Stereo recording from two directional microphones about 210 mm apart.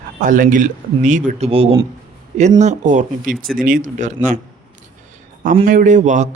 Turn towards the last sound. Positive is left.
turn(degrees=-35)  # may be behind; listen again after turning